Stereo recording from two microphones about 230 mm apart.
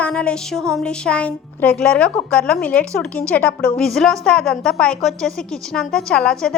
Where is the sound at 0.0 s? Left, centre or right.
Centre.